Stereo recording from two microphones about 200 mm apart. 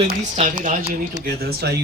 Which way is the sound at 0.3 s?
40° right (ahead or behind).